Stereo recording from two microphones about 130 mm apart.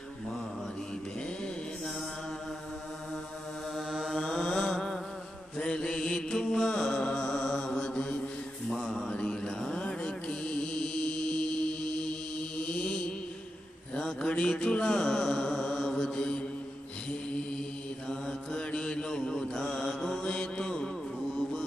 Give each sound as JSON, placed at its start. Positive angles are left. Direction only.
{"t": 3.8, "sound": "mantra", "side_deg": 0}
{"t": 18.1, "sound": "mantra", "side_deg": 5}